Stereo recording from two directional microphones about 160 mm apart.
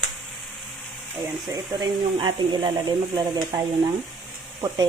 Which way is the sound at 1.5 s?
25° right (ahead or behind).